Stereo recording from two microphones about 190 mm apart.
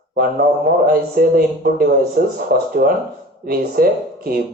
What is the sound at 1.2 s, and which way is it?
Speech, 50° right (ahead or behind).